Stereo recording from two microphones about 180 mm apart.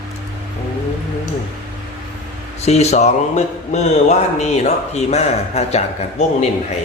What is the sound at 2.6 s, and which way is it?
Speech, 35° left (ahead or behind).